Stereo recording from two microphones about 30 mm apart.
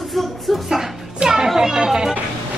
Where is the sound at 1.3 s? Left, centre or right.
Centre.